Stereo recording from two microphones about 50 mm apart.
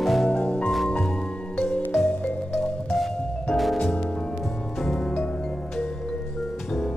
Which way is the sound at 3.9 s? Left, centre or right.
Left.